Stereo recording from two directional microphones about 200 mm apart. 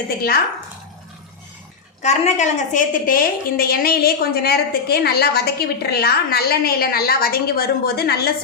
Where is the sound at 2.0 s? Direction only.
35° left (ahead or behind).